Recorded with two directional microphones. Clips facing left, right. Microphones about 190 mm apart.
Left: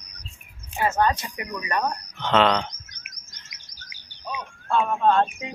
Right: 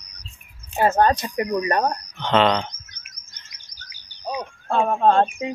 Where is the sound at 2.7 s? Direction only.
35° left (ahead or behind).